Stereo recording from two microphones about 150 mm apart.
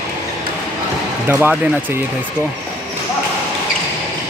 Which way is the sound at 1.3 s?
15° right (ahead or behind).